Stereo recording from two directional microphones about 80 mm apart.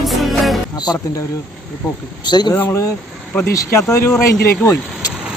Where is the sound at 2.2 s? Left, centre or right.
Left.